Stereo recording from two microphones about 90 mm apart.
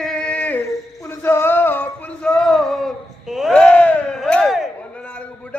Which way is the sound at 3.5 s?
10° left (ahead or behind).